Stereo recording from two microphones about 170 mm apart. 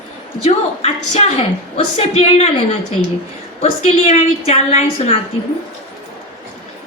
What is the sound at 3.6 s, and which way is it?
A woman's voice, 40° left (ahead or behind).